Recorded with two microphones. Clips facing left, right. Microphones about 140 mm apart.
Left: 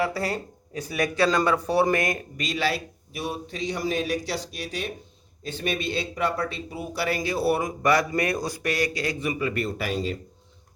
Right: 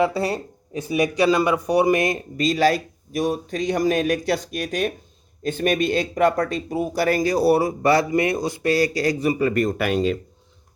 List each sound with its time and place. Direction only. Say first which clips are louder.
0.0 s speech: right 5 dB; 25° right (ahead or behind)
2.4 s a man's voice: right 9 dB; 40° right (ahead or behind); by 10.2 s 70° right (ahead or behind)